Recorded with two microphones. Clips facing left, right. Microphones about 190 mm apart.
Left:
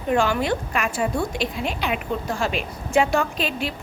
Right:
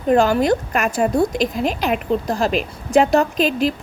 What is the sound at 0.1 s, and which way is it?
A woman's voice, 40° right (ahead or behind).